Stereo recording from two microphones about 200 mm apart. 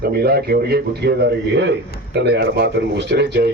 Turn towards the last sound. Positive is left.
turn(degrees=-55)  # may be behind; listen again after turning